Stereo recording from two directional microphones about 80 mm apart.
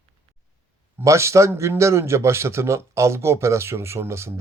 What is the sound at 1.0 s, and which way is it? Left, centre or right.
Speech, right.